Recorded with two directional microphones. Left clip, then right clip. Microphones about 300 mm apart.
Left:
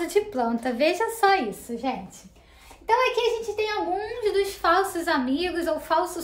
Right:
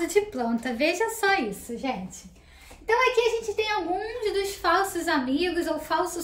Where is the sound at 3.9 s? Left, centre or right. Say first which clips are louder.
Left 3 dB; centre.